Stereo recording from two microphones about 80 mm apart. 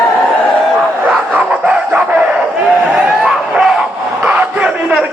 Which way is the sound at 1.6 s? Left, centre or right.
Centre.